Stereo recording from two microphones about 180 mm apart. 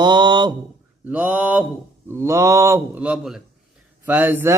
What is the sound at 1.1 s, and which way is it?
Speech, 10° right (ahead or behind).